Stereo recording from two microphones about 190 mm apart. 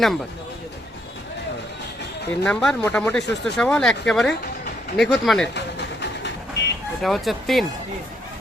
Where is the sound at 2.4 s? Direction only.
5° left (ahead or behind).